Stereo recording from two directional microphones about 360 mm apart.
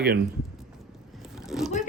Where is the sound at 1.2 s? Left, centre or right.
Centre.